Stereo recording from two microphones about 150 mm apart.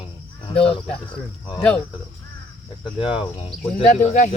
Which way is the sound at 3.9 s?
55° left (ahead or behind).